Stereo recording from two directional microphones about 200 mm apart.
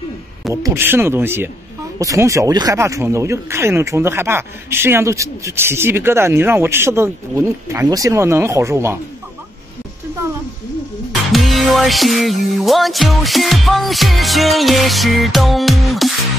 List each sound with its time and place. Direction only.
0.5 s speech: 15° right (ahead or behind)
11.3 s music: centre (ahead or behind)